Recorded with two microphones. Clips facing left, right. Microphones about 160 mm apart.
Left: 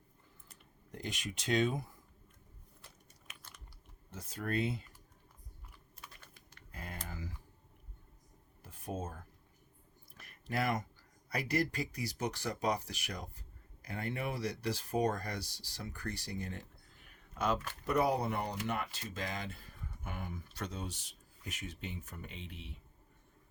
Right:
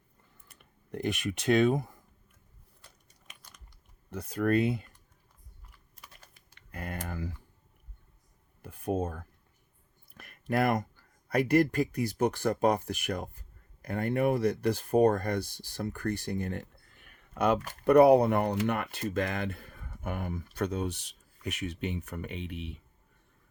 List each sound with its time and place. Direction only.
0.5 s speech: 60° right (ahead or behind)
4.1 s speech: 65° right (ahead or behind)
6.7 s typing: 65° right (ahead or behind)
8.6 s a sound: 60° right (ahead or behind)
10.2 s speech: 60° right (ahead or behind)